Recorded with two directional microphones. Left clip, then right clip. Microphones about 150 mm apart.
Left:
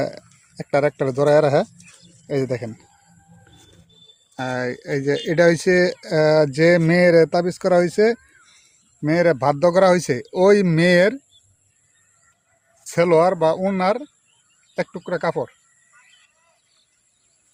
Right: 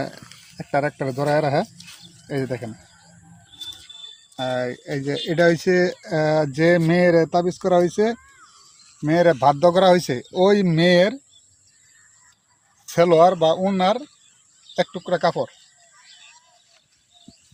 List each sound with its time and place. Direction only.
0.0 s speech: 75° left (ahead or behind)
4.4 s speech: 65° left (ahead or behind); by 8.2 s 90° left
9.0 s speech: 65° left (ahead or behind); by 11.2 s 90° left
12.9 s speech: 70° left (ahead or behind)
14.8 s speech: 50° left (ahead or behind)